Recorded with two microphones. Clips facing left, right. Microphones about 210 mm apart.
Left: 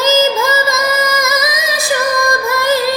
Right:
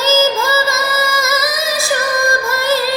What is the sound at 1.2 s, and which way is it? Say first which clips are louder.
Music: left 1 dB; 15° left (ahead or behind).